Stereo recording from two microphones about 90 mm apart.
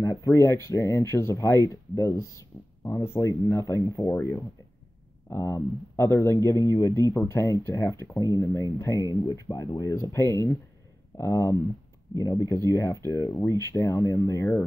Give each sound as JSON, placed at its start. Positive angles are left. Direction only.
{"t": 0.0, "sound": "speech", "side_deg": 40}
{"t": 9.0, "sound": "speech", "side_deg": 50}